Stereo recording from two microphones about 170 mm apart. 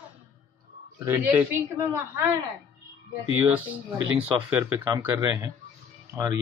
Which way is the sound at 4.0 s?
10° right (ahead or behind).